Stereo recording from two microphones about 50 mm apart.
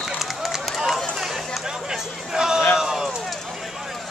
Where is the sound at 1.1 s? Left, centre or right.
Centre.